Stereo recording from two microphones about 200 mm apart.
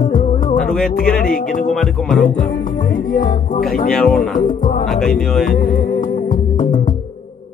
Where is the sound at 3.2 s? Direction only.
45° left (ahead or behind).